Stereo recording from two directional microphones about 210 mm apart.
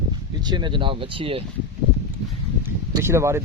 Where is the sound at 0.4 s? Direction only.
20° right (ahead or behind).